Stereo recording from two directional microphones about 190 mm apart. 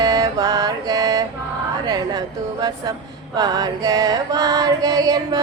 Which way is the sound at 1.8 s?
20° right (ahead or behind).